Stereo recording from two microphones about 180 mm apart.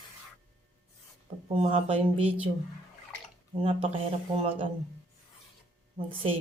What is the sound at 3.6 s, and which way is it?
Speech, 30° right (ahead or behind).